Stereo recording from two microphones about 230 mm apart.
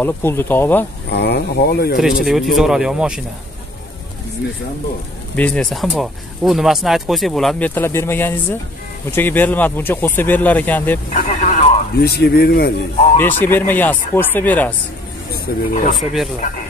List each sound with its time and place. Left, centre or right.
0.0 s speech: centre
1.1 s speech: left
2.2 s speech: centre
5.3 s speech: centre
11.1 s vehicle: left
12.0 s speech: left
13.2 s speech: centre
15.3 s speech: left
16.0 s speech: centre